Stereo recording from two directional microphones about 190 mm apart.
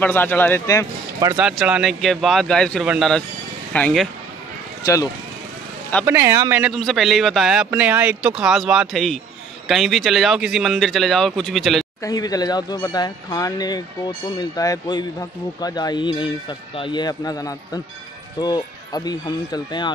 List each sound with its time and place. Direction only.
0.0 s speech: 10° left (ahead or behind)
1.4 s a man's voice: 5° right (ahead or behind)
4.8 s speech: 15° left (ahead or behind)
6.0 s a man's voice: 10° right (ahead or behind)
6.6 s a man's voice: centre (ahead or behind)
12.0 s speech: 20° left (ahead or behind)